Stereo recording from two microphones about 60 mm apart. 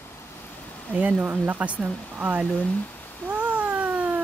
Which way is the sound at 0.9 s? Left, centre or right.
Right.